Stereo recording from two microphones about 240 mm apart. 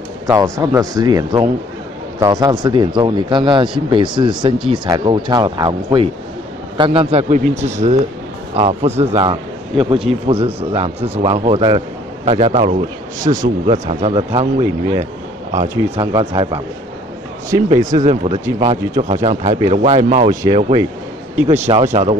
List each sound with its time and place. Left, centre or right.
0.3 s speech: centre; by 20.2 s right
20.2 s speech: centre